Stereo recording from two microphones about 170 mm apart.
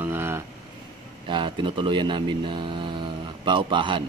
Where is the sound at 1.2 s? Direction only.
30° right (ahead or behind).